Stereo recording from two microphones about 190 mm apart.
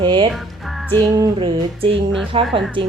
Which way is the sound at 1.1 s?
20° right (ahead or behind).